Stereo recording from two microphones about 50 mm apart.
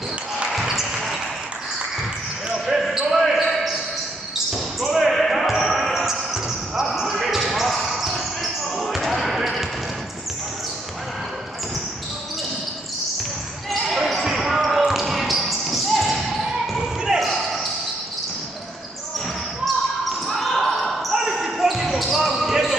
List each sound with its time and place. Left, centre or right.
0.7 s basketball bounce: centre
2.5 s basketball bounce: centre
4.7 s basketball bounce: centre
13.7 s basketball bounce: centre
14.2 s a sound: centre
14.9 s basketball bounce: centre
20.2 s basketball bounce: centre